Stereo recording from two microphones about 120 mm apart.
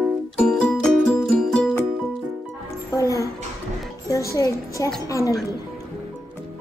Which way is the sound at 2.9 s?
25° left (ahead or behind).